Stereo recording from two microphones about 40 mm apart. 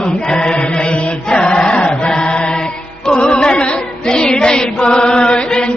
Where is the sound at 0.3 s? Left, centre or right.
Left.